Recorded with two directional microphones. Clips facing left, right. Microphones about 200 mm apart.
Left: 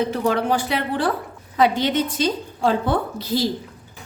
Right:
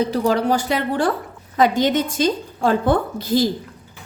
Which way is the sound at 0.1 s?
35° right (ahead or behind).